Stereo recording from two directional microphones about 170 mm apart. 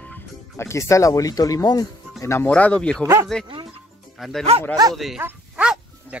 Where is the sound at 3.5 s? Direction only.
30° right (ahead or behind).